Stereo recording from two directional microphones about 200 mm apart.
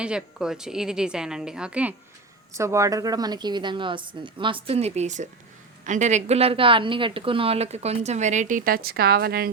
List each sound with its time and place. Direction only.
0.0 s a woman's voice: 5° right (ahead or behind); by 9.5 s 50° right (ahead or behind)